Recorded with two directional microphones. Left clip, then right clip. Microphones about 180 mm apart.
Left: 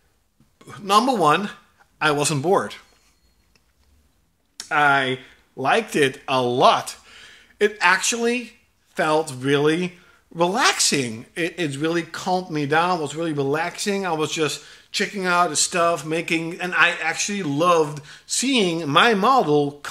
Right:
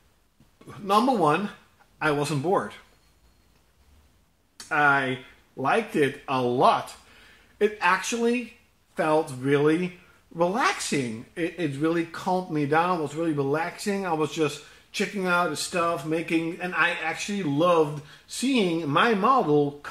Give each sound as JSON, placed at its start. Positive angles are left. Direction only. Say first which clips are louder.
{"t": 0.7, "sound": "speech", "louder": "left 4 dB", "side_deg": 15}
{"t": 2.0, "sound": "speech", "louder": "left 5 dB", "side_deg": 30}
{"t": 4.6, "sound": "speech", "louder": "left 4 dB", "side_deg": 25}
{"t": 14.9, "sound": "speech", "louder": "left 4 dB", "side_deg": 5}